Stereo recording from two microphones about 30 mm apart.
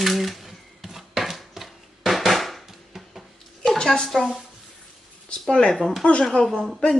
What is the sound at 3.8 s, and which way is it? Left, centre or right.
Speech, left.